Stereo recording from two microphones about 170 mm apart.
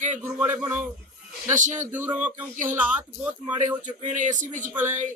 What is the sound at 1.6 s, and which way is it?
Speech, 45° right (ahead or behind).